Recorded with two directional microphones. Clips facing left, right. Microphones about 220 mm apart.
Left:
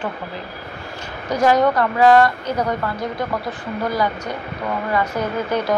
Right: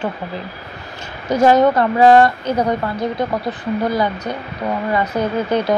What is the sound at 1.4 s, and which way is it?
A woman's voice, 25° right (ahead or behind).